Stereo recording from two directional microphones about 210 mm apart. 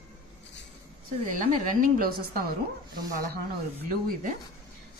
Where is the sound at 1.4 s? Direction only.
40° right (ahead or behind).